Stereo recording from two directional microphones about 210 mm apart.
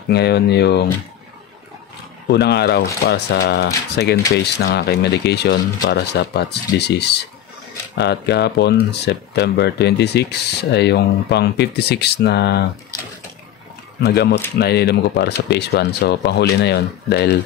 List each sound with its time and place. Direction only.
0.1 s speech: 50° left (ahead or behind)
2.2 s speech: 50° left (ahead or behind)
14.0 s speech: 50° left (ahead or behind)